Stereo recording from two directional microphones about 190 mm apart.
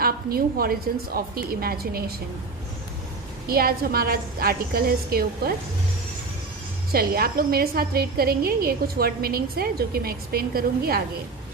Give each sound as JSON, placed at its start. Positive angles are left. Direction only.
{"t": 0.0, "sound": "a woman's voice", "side_deg": -50}
{"t": 3.4, "sound": "a woman's voice", "side_deg": -50}
{"t": 6.9, "sound": "a woman's voice", "side_deg": -50}